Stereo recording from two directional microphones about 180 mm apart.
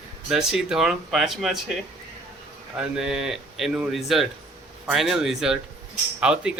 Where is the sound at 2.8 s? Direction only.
5° right (ahead or behind).